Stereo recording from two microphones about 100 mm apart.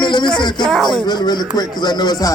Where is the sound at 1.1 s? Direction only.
45° left (ahead or behind).